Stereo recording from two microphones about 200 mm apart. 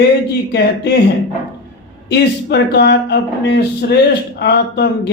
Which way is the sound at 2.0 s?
55° left (ahead or behind).